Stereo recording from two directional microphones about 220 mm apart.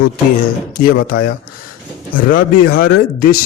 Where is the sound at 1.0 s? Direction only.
40° left (ahead or behind).